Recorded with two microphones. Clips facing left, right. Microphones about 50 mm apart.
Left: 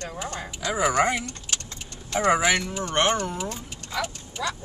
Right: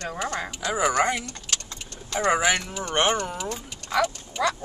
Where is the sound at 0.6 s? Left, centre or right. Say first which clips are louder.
Left 1 dB; centre.